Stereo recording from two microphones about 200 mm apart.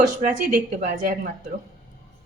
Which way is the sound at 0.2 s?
40° right (ahead or behind).